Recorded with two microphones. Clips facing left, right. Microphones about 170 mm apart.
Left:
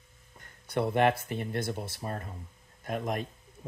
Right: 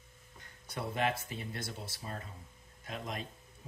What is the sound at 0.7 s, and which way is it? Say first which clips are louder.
Speech: left 9 dB; 60° left (ahead or behind).